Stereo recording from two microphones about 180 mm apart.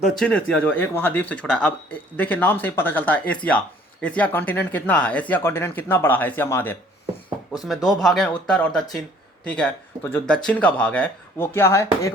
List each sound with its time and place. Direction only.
0.1 s speech: 5° left (ahead or behind)
7.6 s speech: centre (ahead or behind); by 12.1 s 15° left (ahead or behind)